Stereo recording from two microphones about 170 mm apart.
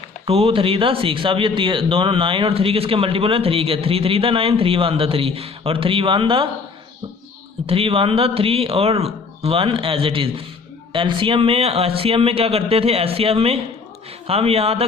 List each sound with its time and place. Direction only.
0.3 s speech: 35° right (ahead or behind)
7.7 s speech: 35° right (ahead or behind)